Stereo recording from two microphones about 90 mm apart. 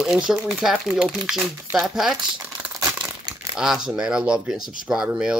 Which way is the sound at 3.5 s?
5° right (ahead or behind).